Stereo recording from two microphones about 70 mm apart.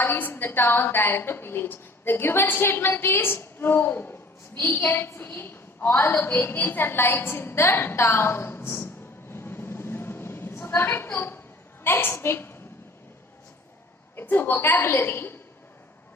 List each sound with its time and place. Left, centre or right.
0.0 s a woman's voice: left
9.3 s a sound: left
11.8 s a woman's voice: left
14.2 s a woman's voice: left